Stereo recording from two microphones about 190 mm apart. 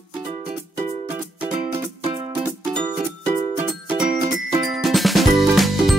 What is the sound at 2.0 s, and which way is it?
Music, 30° right (ahead or behind).